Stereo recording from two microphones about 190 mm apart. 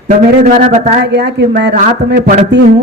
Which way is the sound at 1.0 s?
65° right (ahead or behind).